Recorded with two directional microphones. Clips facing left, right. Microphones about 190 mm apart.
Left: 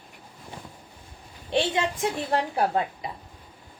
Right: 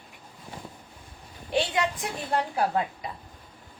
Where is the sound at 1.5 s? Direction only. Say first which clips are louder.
Left 1 dB; 25° left (ahead or behind).